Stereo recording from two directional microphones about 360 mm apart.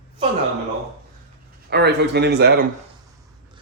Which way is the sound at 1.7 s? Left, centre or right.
Right.